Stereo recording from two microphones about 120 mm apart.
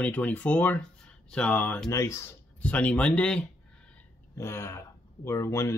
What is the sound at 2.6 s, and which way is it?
Speech, 10° left (ahead or behind).